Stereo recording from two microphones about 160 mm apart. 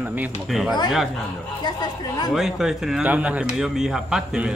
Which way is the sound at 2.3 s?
Centre (ahead or behind).